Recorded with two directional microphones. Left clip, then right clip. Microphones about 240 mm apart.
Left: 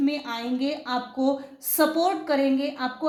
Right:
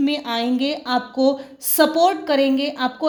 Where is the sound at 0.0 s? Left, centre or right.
Right.